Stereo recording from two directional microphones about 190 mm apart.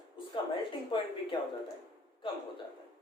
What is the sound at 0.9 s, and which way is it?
Speech, 25° left (ahead or behind).